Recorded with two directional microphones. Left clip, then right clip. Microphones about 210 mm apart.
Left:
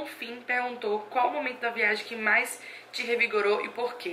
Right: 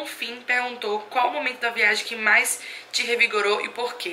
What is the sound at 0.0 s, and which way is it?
Speech, 5° left (ahead or behind).